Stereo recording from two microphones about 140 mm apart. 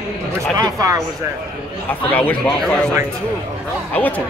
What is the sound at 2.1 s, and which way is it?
Speech, 10° left (ahead or behind).